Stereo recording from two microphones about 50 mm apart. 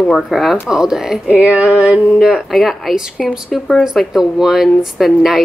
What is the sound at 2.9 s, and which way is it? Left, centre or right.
A woman's voice, centre.